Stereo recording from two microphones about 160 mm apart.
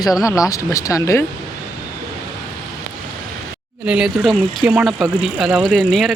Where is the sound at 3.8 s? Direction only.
5° right (ahead or behind).